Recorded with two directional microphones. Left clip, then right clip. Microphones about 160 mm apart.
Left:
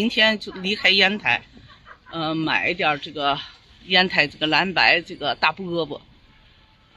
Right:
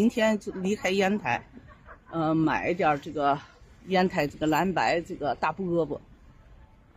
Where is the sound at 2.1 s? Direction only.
20° right (ahead or behind).